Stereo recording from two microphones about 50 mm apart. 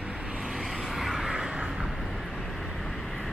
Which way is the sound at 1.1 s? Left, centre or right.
Centre.